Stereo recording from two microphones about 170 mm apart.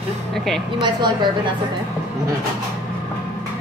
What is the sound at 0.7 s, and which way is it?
Speech, 25° right (ahead or behind).